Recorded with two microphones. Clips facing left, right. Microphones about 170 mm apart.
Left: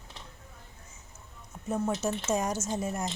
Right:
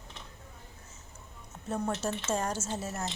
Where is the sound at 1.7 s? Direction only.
5° left (ahead or behind).